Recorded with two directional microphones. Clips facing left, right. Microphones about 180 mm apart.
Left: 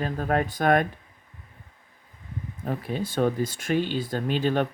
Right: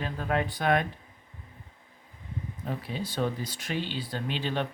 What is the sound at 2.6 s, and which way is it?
Speech, 50° left (ahead or behind).